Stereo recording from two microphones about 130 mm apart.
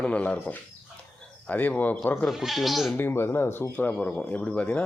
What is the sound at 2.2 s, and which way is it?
Speech, centre (ahead or behind).